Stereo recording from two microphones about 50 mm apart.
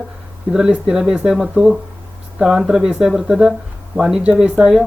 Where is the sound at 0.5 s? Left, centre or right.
Centre.